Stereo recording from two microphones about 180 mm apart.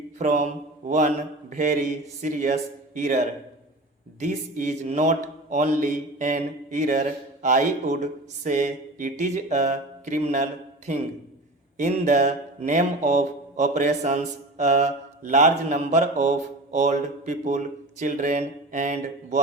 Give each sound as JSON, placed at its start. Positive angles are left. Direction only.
{"t": 0.2, "sound": "speech", "side_deg": -45}
{"t": 4.2, "sound": "speech", "side_deg": -45}
{"t": 14.6, "sound": "mantra", "side_deg": -40}
{"t": 18.0, "sound": "speech", "side_deg": -45}